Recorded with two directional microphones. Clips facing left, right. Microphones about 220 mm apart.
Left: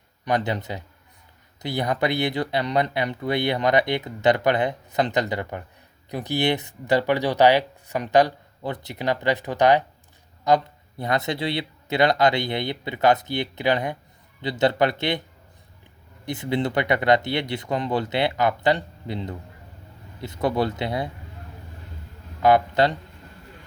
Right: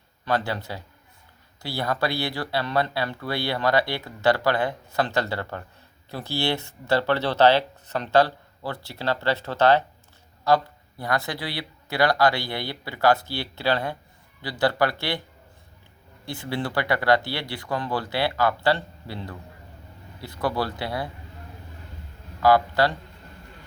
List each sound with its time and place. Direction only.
0.3 s speech: 20° left (ahead or behind)
16.2 s speech: 20° left (ahead or behind)
22.4 s a man's voice: 20° left (ahead or behind)